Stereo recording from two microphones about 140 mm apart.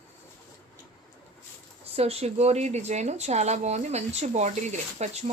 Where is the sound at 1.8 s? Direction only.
45° right (ahead or behind).